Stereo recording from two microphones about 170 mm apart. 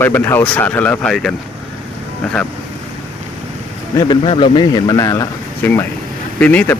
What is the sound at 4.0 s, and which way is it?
A man's voice, 30° left (ahead or behind).